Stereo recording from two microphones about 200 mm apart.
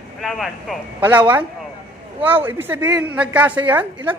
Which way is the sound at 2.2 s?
10° right (ahead or behind).